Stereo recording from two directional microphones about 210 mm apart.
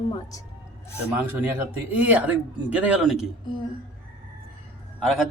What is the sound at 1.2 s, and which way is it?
Speech, 10° right (ahead or behind).